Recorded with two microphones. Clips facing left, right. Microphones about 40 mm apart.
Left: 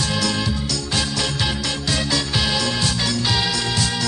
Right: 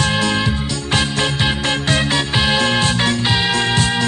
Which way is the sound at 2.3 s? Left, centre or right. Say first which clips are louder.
Right 8 dB; right.